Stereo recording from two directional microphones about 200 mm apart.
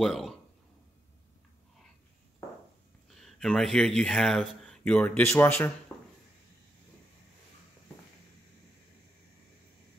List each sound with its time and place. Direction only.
0.0 s speech: centre (ahead or behind)
3.2 s speech: centre (ahead or behind)
5.9 s a sound: 10° left (ahead or behind)